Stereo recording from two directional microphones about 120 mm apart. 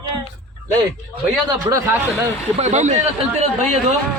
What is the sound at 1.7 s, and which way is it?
Speech, 30° right (ahead or behind).